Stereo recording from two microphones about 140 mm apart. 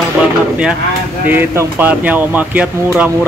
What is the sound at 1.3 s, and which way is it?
Speech, 15° right (ahead or behind).